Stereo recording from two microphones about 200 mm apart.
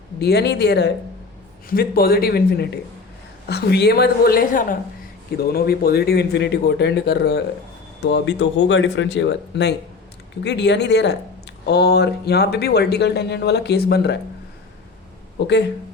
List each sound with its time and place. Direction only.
0.2 s a woman's voice: 55° left (ahead or behind)
15.4 s speech: 60° left (ahead or behind)